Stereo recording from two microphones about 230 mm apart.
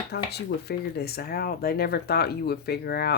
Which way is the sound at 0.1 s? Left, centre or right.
Left.